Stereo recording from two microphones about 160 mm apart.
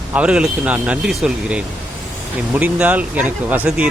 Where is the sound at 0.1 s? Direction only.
5° right (ahead or behind).